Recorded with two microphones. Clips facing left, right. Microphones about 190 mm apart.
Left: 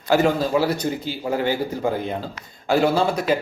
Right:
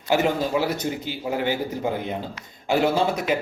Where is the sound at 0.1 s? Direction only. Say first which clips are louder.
Left 3 dB; 20° right (ahead or behind).